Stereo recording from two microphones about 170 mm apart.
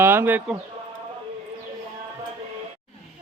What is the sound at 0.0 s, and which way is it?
Speech, 10° right (ahead or behind).